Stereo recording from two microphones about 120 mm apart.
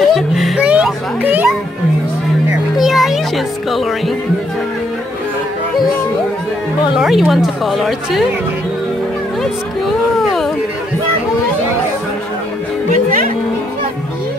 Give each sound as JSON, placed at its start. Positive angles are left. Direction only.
{"t": 0.0, "sound": "speech", "side_deg": 0}
{"t": 0.7, "sound": "a child's voice", "side_deg": -10}
{"t": 2.8, "sound": "music", "side_deg": 0}
{"t": 6.9, "sound": "a woman's voice", "side_deg": -5}
{"t": 9.4, "sound": "a sound", "side_deg": 0}